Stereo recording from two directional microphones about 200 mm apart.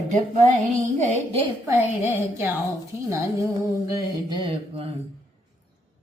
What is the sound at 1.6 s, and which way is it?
Speech, 10° right (ahead or behind).